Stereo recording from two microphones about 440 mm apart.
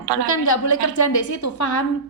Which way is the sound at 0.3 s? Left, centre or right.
Left.